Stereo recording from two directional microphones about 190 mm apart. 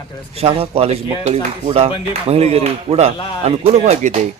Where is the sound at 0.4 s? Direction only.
30° right (ahead or behind).